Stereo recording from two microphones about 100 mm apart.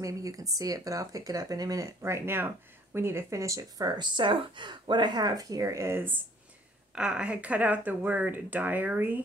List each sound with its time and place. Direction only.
0.0 s speech: 35° right (ahead or behind)
7.0 s speech: 10° right (ahead or behind)